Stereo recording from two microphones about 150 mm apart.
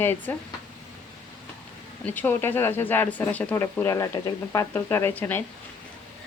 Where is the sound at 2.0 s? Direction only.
10° left (ahead or behind).